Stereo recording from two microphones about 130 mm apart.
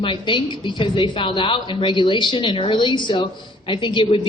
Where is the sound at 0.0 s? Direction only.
40° left (ahead or behind).